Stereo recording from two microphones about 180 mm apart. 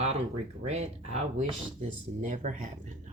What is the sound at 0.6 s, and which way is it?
Speech, 40° right (ahead or behind).